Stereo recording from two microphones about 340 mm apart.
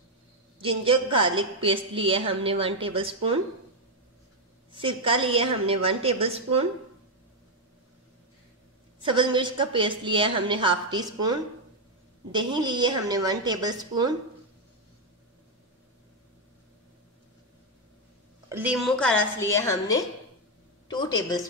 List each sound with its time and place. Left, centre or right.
0.6 s a woman's voice: centre
4.7 s a woman's voice: centre
9.0 s a woman's voice: centre
18.5 s a woman's voice: centre